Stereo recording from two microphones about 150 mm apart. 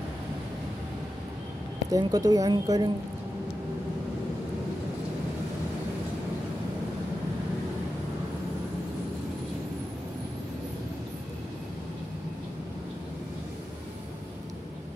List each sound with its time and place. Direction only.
1.9 s speech: 25° right (ahead or behind)